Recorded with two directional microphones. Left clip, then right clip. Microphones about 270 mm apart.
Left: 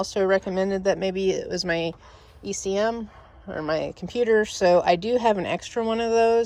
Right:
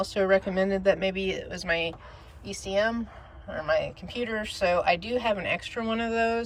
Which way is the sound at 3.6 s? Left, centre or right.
Centre.